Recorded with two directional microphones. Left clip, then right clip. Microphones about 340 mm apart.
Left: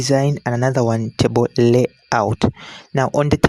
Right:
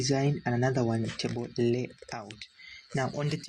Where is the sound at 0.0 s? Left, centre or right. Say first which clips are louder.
Left 11 dB; left.